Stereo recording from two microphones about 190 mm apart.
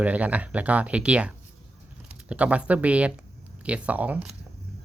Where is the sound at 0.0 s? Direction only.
10° right (ahead or behind).